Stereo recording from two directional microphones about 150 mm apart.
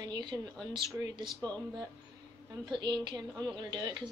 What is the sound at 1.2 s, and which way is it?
Speech, 10° left (ahead or behind).